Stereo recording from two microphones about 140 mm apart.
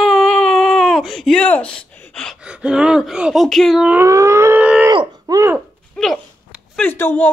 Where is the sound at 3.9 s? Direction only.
20° right (ahead or behind).